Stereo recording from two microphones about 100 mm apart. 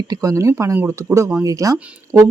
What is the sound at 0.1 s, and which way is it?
Speech, 35° right (ahead or behind).